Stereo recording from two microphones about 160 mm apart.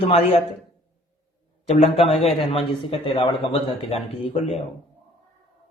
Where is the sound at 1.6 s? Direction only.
40° left (ahead or behind).